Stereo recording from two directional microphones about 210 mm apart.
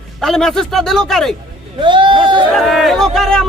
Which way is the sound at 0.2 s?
Centre (ahead or behind).